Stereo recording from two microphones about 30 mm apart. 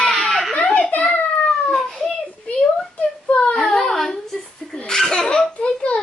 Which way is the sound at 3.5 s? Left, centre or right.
Centre.